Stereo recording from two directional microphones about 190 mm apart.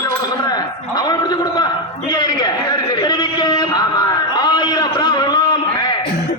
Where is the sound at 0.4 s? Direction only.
20° left (ahead or behind).